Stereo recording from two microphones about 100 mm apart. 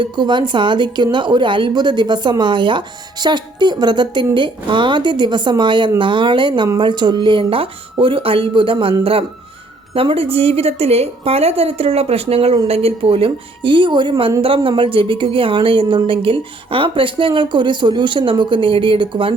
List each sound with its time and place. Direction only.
0.0 s a woman's voice: 50° right (ahead or behind)